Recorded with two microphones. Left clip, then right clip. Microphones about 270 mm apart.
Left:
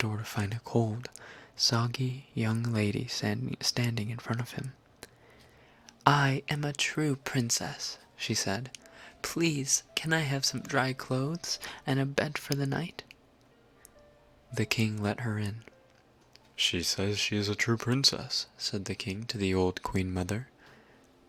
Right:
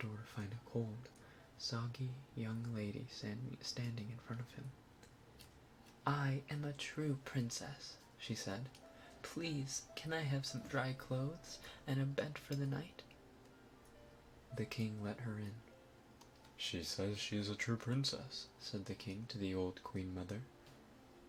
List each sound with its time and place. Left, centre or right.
0.0 s speech: left
14.5 s speech: left
16.6 s speech: left